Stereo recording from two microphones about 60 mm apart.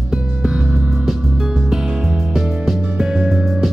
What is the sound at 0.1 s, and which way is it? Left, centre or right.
Music, centre.